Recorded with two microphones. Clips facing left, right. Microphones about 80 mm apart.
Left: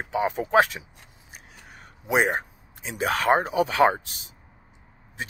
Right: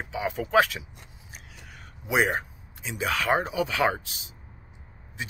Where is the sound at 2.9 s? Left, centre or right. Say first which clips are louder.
Left 4 dB; left.